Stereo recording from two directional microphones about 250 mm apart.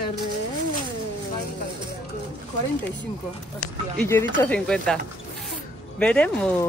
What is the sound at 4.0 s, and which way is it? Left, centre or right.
Speech, centre.